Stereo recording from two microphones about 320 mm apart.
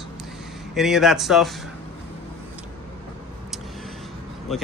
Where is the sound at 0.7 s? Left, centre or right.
Centre.